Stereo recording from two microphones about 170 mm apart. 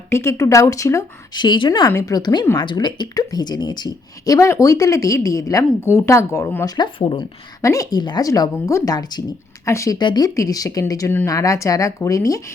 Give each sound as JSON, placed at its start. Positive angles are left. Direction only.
{"t": 0.1, "sound": "a woman's voice", "side_deg": 15}
{"t": 6.7, "sound": "a woman's voice", "side_deg": 30}